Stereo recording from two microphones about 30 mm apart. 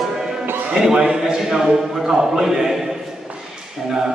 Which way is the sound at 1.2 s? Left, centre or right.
Centre.